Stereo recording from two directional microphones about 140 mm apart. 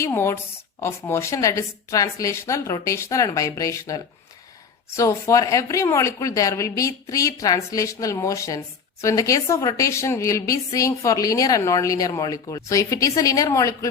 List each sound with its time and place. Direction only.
0.0 s speech: 20° left (ahead or behind)